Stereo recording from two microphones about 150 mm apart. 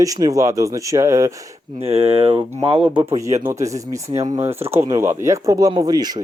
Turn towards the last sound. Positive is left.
turn(degrees=-25)  # may be behind; listen again after turning